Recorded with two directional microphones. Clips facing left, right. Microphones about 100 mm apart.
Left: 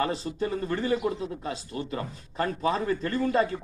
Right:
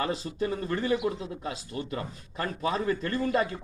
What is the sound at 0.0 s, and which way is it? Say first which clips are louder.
Speech: left 2 dB; 35° left (ahead or behind).